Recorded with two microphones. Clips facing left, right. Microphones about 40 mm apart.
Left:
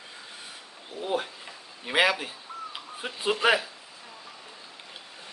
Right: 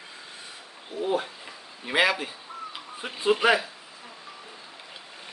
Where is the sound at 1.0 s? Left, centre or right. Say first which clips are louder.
Right 3 dB; centre.